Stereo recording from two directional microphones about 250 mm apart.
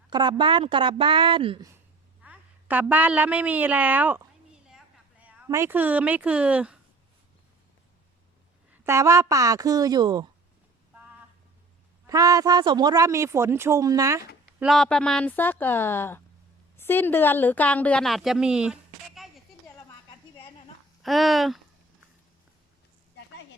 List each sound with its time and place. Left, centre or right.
0.1 s speech: centre
2.2 s a woman's voice: centre
8.7 s speech: centre
12.0 s speech: centre
14.6 s a woman's voice: centre
21.0 s speech: centre
23.2 s a sound: left